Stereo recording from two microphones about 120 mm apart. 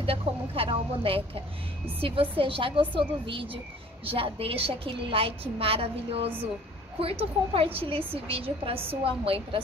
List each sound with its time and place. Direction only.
0.0 s a woman's voice: 50° right (ahead or behind)